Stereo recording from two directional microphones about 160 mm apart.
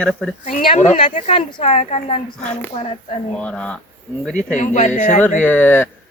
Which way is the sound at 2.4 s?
5° left (ahead or behind).